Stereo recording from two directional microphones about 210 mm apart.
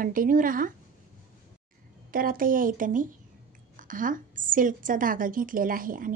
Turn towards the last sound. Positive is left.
turn(degrees=-40)  # may be behind; listen again after turning